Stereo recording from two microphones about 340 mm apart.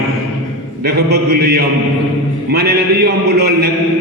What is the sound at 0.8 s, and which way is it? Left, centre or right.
Speech, right.